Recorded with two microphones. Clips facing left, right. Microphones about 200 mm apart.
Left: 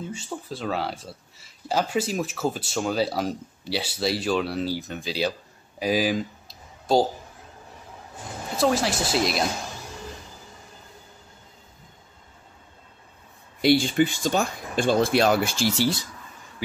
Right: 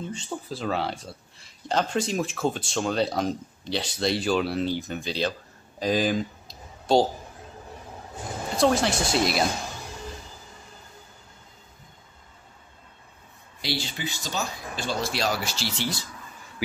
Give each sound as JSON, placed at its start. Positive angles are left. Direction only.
{"t": 0.0, "sound": "speech", "side_deg": 5}
{"t": 5.8, "sound": "a sound", "side_deg": 5}
{"t": 8.5, "sound": "speech", "side_deg": 5}
{"t": 13.6, "sound": "speech", "side_deg": 50}